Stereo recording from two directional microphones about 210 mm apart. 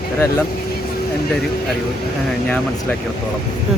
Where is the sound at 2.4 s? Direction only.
5° left (ahead or behind).